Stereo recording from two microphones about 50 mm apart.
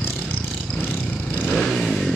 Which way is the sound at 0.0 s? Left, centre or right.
Left.